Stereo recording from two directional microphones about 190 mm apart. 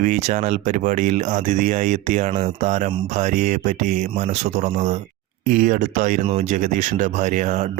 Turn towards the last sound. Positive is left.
turn(degrees=-40)  # may be behind; listen again after turning